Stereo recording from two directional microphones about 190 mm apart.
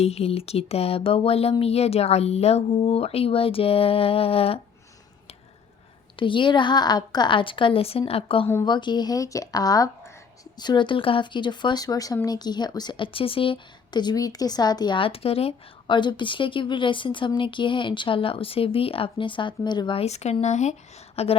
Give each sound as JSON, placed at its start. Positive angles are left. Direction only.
{"t": 0.0, "sound": "speech", "side_deg": 30}
{"t": 6.1, "sound": "speech", "side_deg": 25}